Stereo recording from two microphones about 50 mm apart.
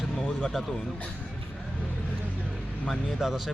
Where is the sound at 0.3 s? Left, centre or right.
Left.